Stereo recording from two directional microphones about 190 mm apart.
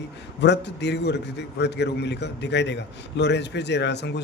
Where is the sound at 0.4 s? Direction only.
65° left (ahead or behind).